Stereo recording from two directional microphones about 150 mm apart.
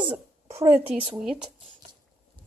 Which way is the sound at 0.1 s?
15° right (ahead or behind).